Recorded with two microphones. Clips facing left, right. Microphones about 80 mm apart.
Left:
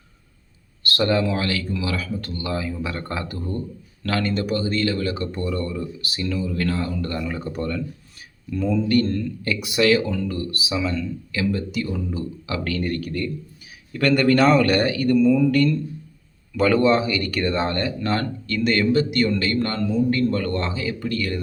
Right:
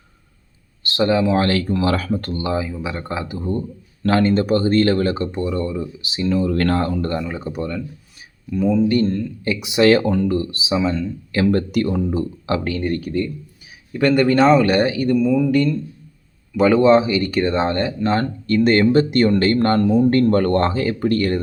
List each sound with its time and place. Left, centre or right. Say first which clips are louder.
0.8 s speech: right 3 dB; right
1.3 s speech: right 7 dB; right
2.4 s speech: right 4 dB; right
5.3 s speech: right 4 dB; right
6.4 s speech: right 5 dB; right
7.1 s speech: right 3 dB; right
9.8 s speech: right 5 dB; right
10.3 s speech: right 6 dB; right
11.5 s speech: right 7 dB; right
12.6 s speech: right 3 dB; right